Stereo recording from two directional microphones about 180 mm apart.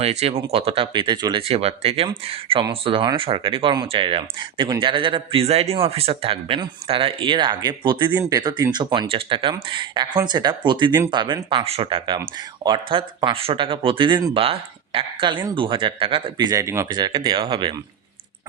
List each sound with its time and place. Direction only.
0.0 s speech: 35° right (ahead or behind)